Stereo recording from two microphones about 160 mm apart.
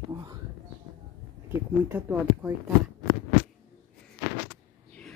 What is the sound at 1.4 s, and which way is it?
Speech, 10° right (ahead or behind).